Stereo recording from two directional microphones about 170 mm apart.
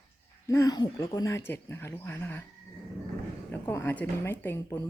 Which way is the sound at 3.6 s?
15° left (ahead or behind).